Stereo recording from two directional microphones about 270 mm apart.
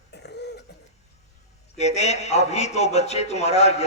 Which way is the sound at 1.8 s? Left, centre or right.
Left.